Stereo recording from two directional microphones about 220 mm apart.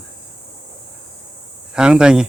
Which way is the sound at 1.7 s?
5° right (ahead or behind).